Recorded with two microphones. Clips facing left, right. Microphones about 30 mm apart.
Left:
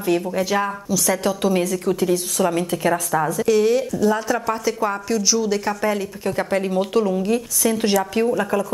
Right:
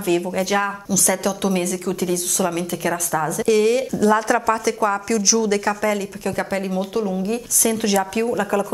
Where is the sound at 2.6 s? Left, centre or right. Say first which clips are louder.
Left 2 dB; left.